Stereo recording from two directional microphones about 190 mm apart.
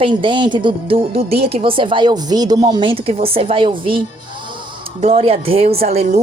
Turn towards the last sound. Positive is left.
turn(degrees=-35)  # may be behind; listen again after turning